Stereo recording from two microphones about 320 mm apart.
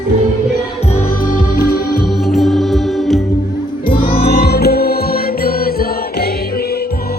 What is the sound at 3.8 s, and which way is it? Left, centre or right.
Music, centre.